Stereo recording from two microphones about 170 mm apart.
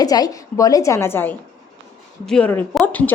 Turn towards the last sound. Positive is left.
turn(degrees=10)  # may be behind; listen again after turning